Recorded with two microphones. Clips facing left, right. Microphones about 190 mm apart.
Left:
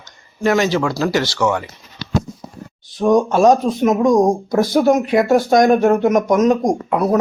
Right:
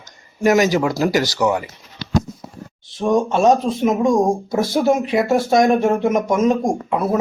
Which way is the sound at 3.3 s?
Centre (ahead or behind).